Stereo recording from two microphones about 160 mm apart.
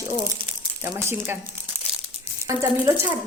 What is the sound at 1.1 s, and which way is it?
Speech, 15° right (ahead or behind).